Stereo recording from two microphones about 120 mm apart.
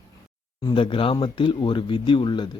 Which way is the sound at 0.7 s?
45° left (ahead or behind).